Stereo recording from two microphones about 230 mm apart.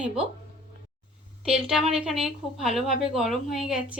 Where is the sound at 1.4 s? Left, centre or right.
Centre.